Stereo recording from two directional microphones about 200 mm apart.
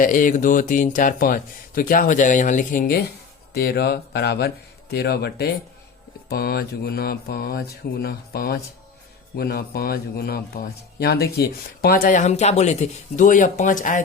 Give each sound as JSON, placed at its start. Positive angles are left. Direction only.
{"t": 0.0, "sound": "speech", "side_deg": 40}